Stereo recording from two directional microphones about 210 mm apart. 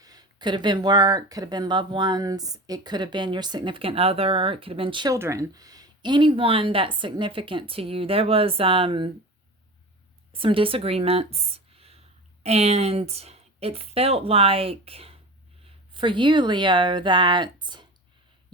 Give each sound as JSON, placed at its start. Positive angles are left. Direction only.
{"t": 0.0, "sound": "speech", "side_deg": -20}
{"t": 10.3, "sound": "speech", "side_deg": -25}